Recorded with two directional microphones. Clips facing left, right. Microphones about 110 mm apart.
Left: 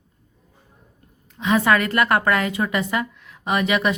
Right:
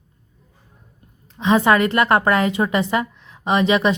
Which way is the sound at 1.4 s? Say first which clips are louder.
Right 3 dB; 25° right (ahead or behind).